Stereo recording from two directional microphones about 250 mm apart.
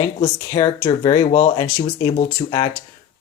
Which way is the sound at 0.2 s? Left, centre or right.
Centre.